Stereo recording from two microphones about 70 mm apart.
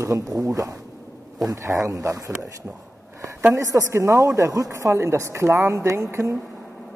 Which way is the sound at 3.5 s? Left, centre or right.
Right.